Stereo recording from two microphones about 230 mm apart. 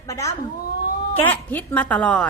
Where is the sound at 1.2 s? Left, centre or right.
Centre.